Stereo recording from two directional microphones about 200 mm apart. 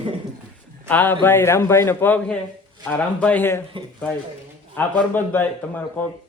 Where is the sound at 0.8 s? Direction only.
10° left (ahead or behind).